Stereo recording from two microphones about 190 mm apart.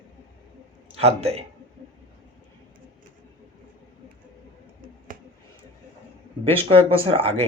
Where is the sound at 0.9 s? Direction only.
35° right (ahead or behind).